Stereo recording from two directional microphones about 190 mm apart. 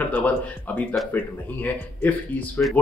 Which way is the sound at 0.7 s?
10° left (ahead or behind).